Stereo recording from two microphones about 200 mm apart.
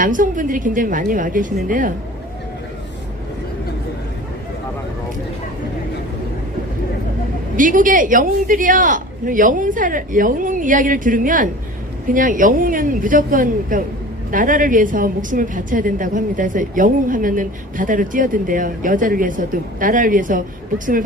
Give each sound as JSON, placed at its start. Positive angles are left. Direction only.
{"t": 0.0, "sound": "a woman's voice", "side_deg": -40}
{"t": 7.5, "sound": "a woman's voice", "side_deg": -40}